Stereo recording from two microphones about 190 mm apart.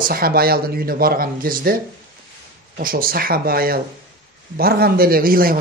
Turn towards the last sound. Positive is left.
turn(degrees=-50)  # may be behind; listen again after turning